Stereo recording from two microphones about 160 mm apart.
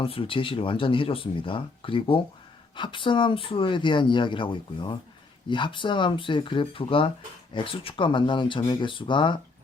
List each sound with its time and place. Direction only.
0.0 s speech: 35° left (ahead or behind)